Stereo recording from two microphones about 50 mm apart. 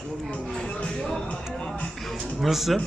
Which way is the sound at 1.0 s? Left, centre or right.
Centre.